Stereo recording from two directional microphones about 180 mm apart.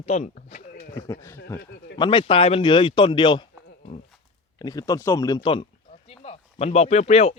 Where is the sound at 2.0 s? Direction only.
30° left (ahead or behind).